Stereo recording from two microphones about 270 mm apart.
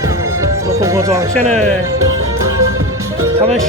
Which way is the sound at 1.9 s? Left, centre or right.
Right.